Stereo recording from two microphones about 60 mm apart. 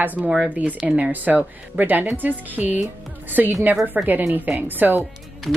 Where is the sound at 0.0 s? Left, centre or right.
Right.